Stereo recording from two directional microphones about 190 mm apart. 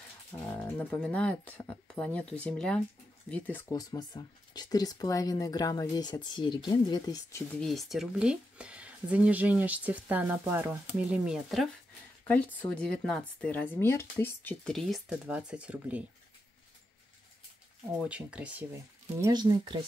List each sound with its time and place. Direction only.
0.3 s speech: 10° left (ahead or behind)
7.5 s speech: centre (ahead or behind)
17.9 s speech: 5° right (ahead or behind)
19.1 s speech: 20° right (ahead or behind)